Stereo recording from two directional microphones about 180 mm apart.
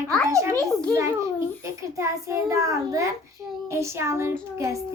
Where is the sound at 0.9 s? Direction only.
15° right (ahead or behind).